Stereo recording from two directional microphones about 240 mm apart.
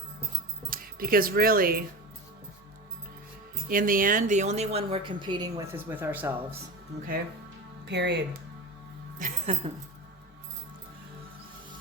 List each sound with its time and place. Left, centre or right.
0.7 s speech: right
3.7 s speech: right; by 6.3 s centre
7.9 s speech: right
9.1 s music: right